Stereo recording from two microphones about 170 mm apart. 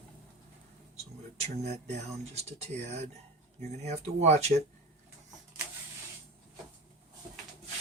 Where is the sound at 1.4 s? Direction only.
40° right (ahead or behind).